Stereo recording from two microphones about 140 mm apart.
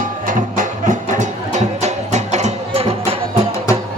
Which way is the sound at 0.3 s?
65° right (ahead or behind).